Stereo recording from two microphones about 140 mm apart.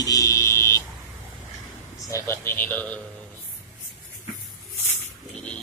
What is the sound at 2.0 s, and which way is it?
Speech, 20° left (ahead or behind).